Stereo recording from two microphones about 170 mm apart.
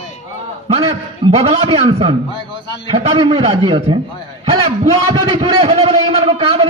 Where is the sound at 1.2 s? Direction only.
35° right (ahead or behind).